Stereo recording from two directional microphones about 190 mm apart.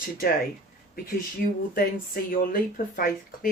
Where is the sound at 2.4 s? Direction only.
50° left (ahead or behind).